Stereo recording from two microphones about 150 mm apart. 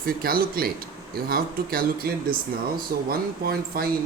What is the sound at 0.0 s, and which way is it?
Speech, 80° right.